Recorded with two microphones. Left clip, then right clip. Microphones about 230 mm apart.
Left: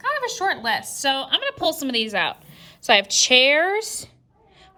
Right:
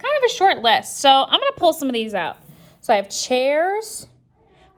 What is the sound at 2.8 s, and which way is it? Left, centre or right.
Speech, left.